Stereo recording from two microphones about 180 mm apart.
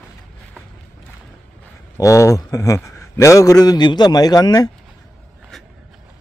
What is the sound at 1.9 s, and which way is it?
A man's voice, 15° left (ahead or behind).